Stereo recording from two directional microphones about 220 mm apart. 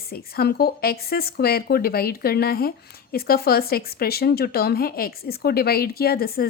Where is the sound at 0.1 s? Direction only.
45° left (ahead or behind).